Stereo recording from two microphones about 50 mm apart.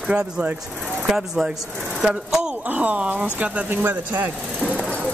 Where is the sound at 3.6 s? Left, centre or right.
Right.